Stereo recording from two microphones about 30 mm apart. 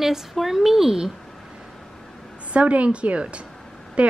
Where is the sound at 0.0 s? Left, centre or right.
Centre.